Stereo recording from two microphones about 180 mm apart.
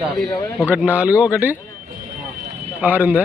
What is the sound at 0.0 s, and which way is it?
Speech, centre (ahead or behind).